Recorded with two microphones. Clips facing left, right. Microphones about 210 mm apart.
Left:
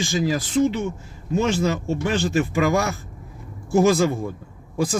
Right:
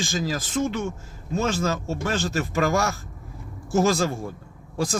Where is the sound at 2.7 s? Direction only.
15° left (ahead or behind).